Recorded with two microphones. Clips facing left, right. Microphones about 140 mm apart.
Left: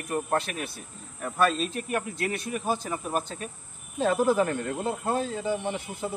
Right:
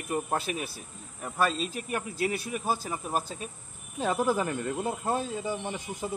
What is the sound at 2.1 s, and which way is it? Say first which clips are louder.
Speech: even; 5° right (ahead or behind).